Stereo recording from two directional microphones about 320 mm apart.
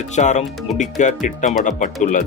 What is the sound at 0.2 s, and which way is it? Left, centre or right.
Speech, left.